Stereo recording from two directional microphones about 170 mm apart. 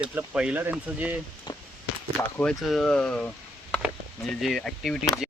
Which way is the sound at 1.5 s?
25° left (ahead or behind).